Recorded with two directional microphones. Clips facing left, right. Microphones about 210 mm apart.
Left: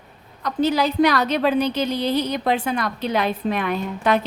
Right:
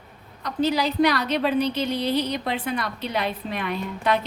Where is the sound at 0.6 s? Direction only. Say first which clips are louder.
Left 3 dB; 50° left (ahead or behind).